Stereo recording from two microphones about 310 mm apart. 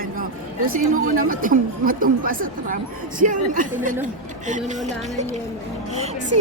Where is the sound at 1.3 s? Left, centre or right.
Right.